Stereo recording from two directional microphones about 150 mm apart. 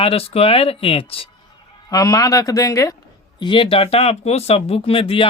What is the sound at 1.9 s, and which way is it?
Speech, 25° left (ahead or behind).